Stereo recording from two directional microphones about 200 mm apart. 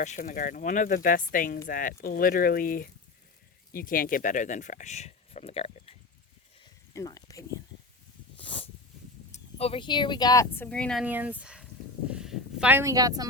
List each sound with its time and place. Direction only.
0.0 s speech: 40° left (ahead or behind)
6.9 s a sound: 15° left (ahead or behind)
8.4 s dog: 25° left (ahead or behind)
9.3 s speech: 30° left (ahead or behind); by 11.0 s 5° left (ahead or behind)
11.0 s speech: 10° right (ahead or behind)